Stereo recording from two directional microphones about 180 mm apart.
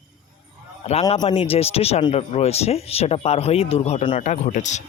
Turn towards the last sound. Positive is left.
turn(degrees=45)  # may be behind; listen again after turning